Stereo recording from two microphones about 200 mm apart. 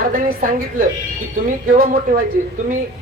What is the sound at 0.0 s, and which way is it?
Speech, 45° right (ahead or behind).